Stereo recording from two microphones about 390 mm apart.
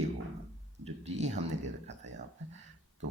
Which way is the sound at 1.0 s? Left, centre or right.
Centre.